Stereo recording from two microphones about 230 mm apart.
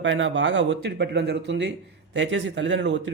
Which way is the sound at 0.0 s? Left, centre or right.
Right.